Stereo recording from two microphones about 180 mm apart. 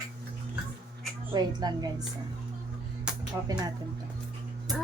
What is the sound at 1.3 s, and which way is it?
Music, 20° right (ahead or behind).